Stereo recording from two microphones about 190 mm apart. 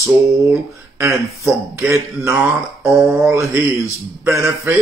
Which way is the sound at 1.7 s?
15° right (ahead or behind).